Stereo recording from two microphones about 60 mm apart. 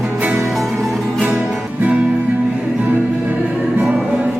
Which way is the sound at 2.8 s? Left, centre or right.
Right.